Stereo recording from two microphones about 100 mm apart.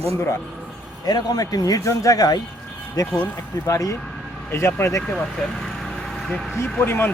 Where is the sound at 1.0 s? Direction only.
40° left (ahead or behind).